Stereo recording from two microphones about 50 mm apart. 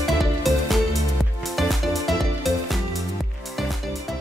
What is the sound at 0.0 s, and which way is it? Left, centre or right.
Music, centre.